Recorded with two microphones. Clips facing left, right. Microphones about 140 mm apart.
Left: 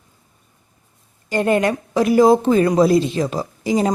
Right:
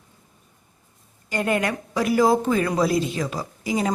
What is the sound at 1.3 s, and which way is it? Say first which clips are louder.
A woman's voice: left 6 dB; 30° left (ahead or behind).